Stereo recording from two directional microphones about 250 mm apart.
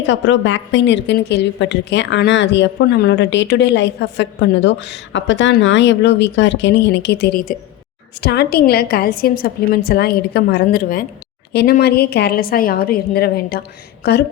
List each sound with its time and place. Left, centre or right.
0.0 s a woman's voice: left